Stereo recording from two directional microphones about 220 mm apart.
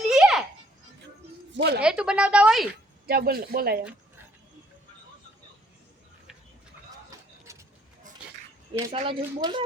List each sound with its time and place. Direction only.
0.1 s a sound: 5° right (ahead or behind)
1.5 s a woman's voice: 50° right (ahead or behind)
1.8 s speech: 5° right (ahead or behind)
3.1 s speech: 45° right (ahead or behind)
7.5 s a sound: 15° right (ahead or behind)
8.9 s speech: 25° right (ahead or behind)